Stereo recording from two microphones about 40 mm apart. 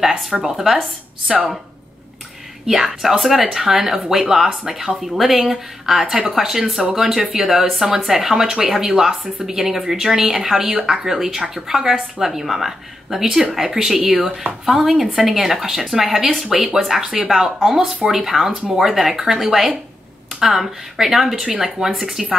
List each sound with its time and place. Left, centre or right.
0.3 s speech: centre
2.6 s speech: centre